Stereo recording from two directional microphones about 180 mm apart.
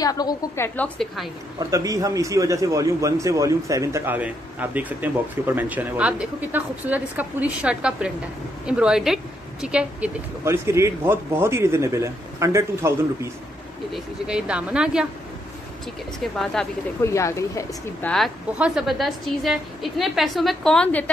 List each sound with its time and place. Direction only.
0.0 s a woman's voice: 20° left (ahead or behind)
0.7 s speech: 5° left (ahead or behind)
1.6 s a man's voice: 20° right (ahead or behind)
13.9 s speech: 5° right (ahead or behind)
16.6 s speech: 5° left (ahead or behind)
17.0 s speech: 15° left (ahead or behind)
18.1 s speech: centre (ahead or behind)